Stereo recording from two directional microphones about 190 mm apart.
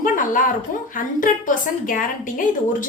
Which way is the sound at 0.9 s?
45° left (ahead or behind).